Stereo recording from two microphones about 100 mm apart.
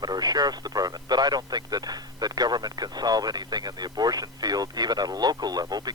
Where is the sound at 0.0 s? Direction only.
40° right (ahead or behind).